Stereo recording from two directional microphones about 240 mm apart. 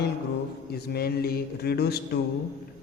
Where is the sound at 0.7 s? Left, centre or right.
Left.